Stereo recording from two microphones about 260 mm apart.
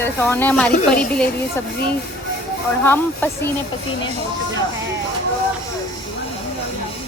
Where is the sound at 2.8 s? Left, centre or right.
Centre.